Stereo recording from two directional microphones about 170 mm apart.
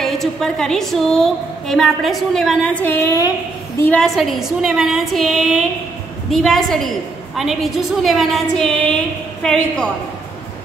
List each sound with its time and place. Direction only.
0.0 s a woman's voice: centre (ahead or behind)